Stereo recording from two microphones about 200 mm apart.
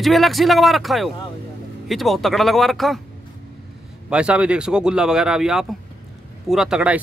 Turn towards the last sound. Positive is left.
turn(degrees=-5)  # may be behind; listen again after turning